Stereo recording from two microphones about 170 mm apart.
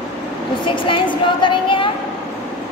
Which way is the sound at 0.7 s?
30° left (ahead or behind).